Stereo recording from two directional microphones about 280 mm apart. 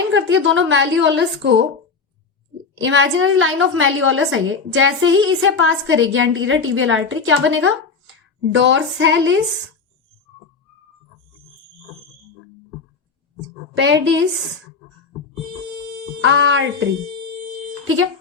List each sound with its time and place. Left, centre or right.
0.1 s a woman's voice: right
2.7 s a woman's voice: right
13.7 s a woman's voice: right
16.2 s a woman's voice: right
17.8 s speech: right